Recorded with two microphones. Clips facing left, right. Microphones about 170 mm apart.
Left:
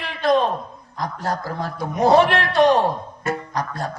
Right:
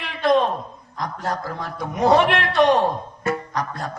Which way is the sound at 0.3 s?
Centre (ahead or behind).